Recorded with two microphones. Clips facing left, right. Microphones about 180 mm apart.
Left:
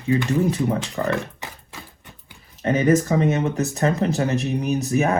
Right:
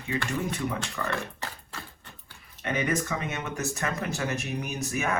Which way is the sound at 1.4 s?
15° left (ahead or behind).